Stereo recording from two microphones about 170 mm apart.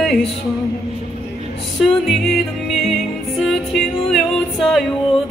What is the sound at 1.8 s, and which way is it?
Music, centre (ahead or behind).